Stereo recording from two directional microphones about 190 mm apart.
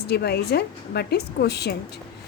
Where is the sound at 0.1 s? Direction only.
60° left (ahead or behind).